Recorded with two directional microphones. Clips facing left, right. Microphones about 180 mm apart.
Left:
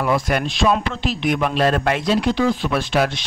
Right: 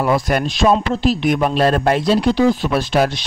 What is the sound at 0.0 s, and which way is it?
Speech, 40° right (ahead or behind).